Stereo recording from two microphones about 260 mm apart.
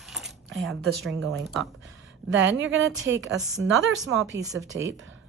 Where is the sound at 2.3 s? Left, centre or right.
Right.